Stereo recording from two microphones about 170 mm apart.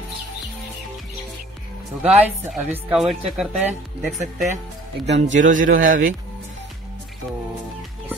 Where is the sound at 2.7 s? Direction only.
5° right (ahead or behind).